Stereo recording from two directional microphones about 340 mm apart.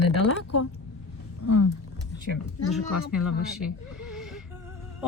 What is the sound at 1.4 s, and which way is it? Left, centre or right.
Speech, left.